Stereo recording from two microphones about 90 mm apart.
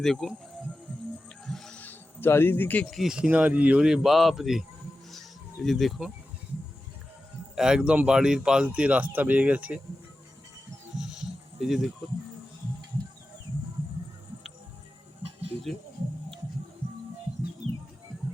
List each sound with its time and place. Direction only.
0.0 s speech: 5° left (ahead or behind)
1.5 s music: 5° left (ahead or behind)
1.8 s a sound: 25° left (ahead or behind)
2.9 s speech: 5° right (ahead or behind)
3.2 s speech: 20° right (ahead or behind); by 4.6 s 5° right (ahead or behind)
5.6 s speech: centre (ahead or behind)
7.5 s speech: 5° right (ahead or behind)
10.9 s music: 5° right (ahead or behind)